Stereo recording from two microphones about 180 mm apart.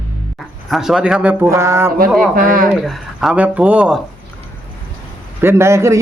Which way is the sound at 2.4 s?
50° right (ahead or behind).